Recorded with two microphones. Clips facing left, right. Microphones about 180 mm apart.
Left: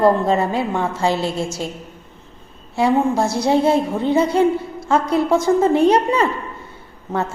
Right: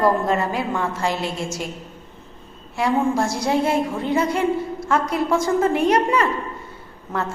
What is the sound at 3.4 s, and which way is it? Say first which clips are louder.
A woman's voice: left 5 dB; 30° left (ahead or behind).